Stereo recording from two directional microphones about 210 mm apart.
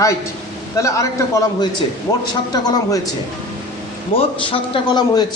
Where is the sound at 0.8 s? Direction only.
15° left (ahead or behind).